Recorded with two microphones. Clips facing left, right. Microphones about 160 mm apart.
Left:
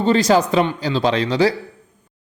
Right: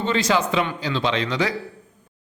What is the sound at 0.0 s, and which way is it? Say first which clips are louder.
A man's voice: left 6 dB; 40° left (ahead or behind).